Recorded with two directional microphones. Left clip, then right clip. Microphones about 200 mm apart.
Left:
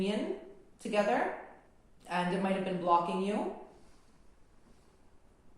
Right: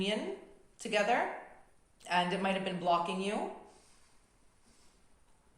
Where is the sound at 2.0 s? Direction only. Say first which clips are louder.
Right 1 dB; 45° right (ahead or behind).